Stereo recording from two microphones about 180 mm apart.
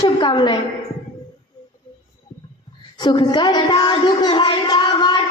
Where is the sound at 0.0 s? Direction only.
25° left (ahead or behind).